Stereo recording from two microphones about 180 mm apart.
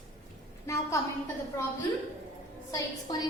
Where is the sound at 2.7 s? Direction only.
20° left (ahead or behind).